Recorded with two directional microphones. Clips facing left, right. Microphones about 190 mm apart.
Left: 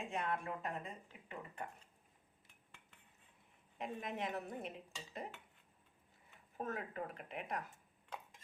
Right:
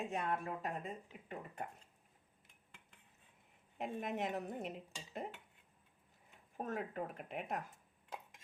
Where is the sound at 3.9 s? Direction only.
45° right (ahead or behind).